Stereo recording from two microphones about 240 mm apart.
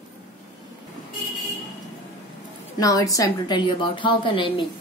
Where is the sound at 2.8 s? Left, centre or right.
Centre.